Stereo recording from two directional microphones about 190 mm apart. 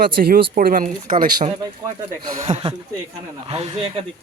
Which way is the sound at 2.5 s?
30° right (ahead or behind).